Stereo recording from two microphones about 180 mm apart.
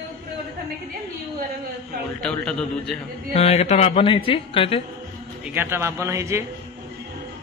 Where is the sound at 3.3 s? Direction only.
35° left (ahead or behind).